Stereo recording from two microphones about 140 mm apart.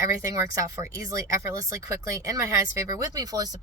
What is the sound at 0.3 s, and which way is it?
Speech, 25° right (ahead or behind).